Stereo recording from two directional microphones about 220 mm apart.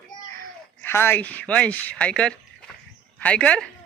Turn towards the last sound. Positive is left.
turn(degrees=5)  # may be behind; listen again after turning